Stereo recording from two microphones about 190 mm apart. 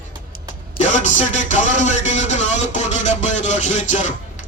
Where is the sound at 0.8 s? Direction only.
40° left (ahead or behind).